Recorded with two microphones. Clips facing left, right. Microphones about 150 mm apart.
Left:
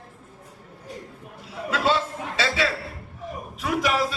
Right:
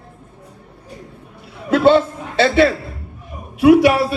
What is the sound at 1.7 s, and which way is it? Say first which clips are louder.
Chuckle: right 11 dB; 60° right (ahead or behind).